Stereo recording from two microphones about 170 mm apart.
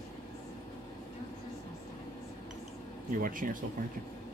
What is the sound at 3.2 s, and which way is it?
Speech, 55° right (ahead or behind).